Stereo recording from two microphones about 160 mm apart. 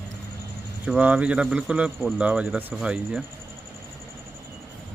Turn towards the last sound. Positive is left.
turn(degrees=-5)  # may be behind; listen again after turning